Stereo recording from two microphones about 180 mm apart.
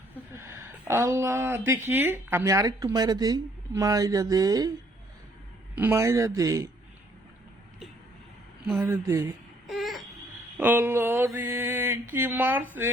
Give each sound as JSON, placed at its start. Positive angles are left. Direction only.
{"t": 0.1, "sound": "speech", "side_deg": -15}
{"t": 5.7, "sound": "speech", "side_deg": -10}
{"t": 8.6, "sound": "speech", "side_deg": 0}
{"t": 8.9, "sound": "speech", "side_deg": -15}
{"t": 9.6, "sound": "a sound", "side_deg": 0}
{"t": 10.6, "sound": "speech", "side_deg": -10}